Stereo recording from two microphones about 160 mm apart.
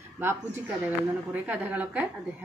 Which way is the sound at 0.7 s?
10° right (ahead or behind).